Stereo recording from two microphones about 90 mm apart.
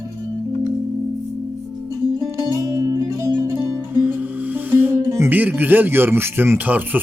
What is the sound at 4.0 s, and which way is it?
Music, 20° right (ahead or behind).